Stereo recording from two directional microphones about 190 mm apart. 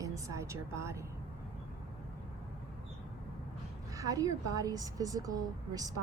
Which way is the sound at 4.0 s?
20° right (ahead or behind).